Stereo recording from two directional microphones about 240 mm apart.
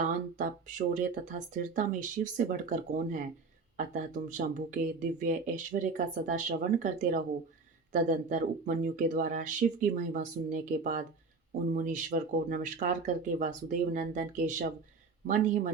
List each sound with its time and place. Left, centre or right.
0.0 s speech: right